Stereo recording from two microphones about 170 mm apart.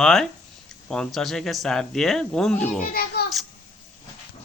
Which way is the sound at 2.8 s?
65° left (ahead or behind).